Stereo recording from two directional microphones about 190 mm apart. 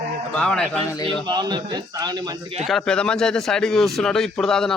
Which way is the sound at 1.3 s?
20° right (ahead or behind).